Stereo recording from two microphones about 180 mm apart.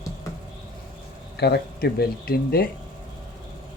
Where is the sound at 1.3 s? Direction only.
65° left (ahead or behind).